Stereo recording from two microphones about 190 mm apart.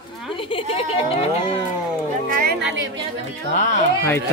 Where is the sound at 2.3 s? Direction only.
50° right (ahead or behind).